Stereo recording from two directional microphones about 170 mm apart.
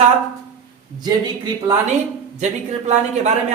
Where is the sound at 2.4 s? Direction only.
45° right (ahead or behind).